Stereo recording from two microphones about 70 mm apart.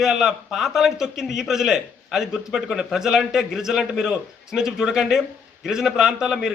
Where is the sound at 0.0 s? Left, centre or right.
Centre.